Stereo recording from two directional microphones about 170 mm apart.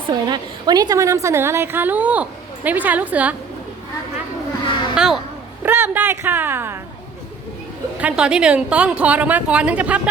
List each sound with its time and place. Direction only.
0.1 s a woman's voice: 25° right (ahead or behind); by 3.3 s 10° right (ahead or behind)
4.9 s a child's voice: centre (ahead or behind)
7.9 s a woman's voice: 5° right (ahead or behind)